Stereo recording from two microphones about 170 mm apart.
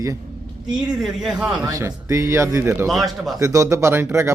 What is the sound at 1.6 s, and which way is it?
A man's voice, 20° right (ahead or behind).